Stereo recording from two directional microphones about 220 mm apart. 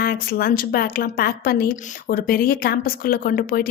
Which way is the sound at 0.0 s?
45° left (ahead or behind).